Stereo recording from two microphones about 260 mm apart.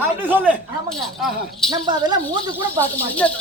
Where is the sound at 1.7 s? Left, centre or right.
Centre.